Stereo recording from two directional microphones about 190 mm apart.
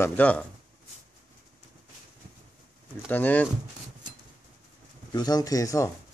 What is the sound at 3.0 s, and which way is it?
Speech, 10° left (ahead or behind).